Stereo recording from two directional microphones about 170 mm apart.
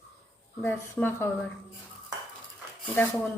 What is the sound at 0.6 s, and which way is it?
Speech, 10° left (ahead or behind).